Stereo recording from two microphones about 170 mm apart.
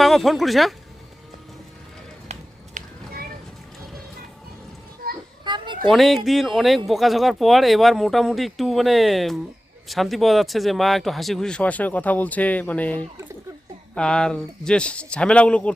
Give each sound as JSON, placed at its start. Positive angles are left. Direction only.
{"t": 0.0, "sound": "speech", "side_deg": 0}
{"t": 2.2, "sound": "a sound", "side_deg": -40}
{"t": 5.5, "sound": "children playing", "side_deg": -30}
{"t": 5.9, "sound": "speech", "side_deg": 0}